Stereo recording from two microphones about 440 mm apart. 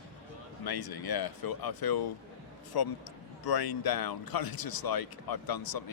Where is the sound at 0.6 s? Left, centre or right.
Left.